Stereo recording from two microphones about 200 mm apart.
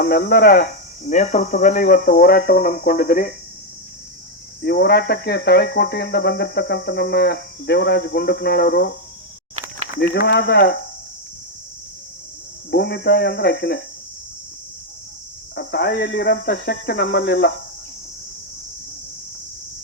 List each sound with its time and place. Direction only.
0.0 s speech: 50° left (ahead or behind)
4.6 s speech: 55° left (ahead or behind)
10.0 s speech: 55° left (ahead or behind)
12.7 s speech: 55° left (ahead or behind)
15.5 s speech: 55° left (ahead or behind)